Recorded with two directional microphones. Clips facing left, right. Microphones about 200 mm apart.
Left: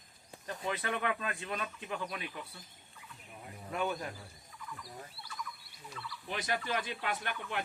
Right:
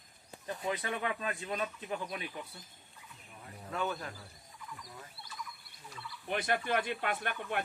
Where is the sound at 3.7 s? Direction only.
15° left (ahead or behind).